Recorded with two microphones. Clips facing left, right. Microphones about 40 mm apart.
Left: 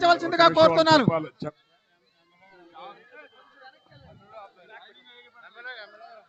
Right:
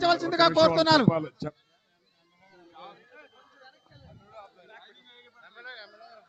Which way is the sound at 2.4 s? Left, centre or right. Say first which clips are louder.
Left 3 dB; centre.